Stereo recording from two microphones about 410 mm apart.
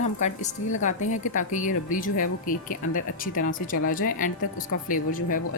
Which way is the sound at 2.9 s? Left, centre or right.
Left.